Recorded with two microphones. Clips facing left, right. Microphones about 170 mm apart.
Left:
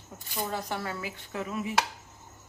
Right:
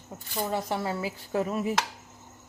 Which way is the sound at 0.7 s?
25° right (ahead or behind).